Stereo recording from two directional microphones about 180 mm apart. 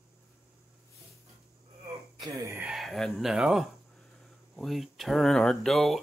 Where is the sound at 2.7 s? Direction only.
Centre (ahead or behind).